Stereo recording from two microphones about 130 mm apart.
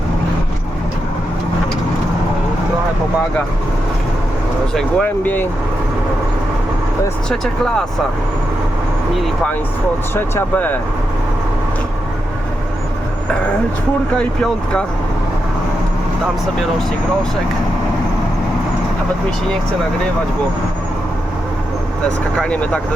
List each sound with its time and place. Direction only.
4.7 s speech: 5° left (ahead or behind)
7.3 s speech: 5° left (ahead or behind)
10.2 s speech: 15° left (ahead or behind)
14.2 s speech: 5° left (ahead or behind)
22.4 s speech: 10° left (ahead or behind)